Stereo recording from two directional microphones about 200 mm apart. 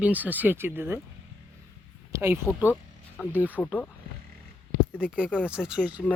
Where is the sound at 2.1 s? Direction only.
10° right (ahead or behind).